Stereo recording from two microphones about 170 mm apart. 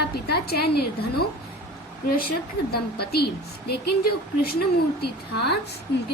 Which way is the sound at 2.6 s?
75° left (ahead or behind).